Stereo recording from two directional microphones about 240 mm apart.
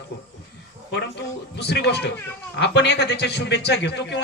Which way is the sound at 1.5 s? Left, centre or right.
Left.